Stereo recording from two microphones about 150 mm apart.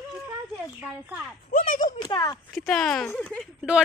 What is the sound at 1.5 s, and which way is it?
Speech, 65° left (ahead or behind).